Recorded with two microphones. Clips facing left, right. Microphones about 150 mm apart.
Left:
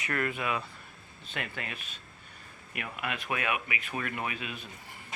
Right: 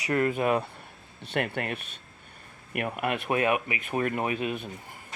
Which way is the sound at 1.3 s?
60° right (ahead or behind).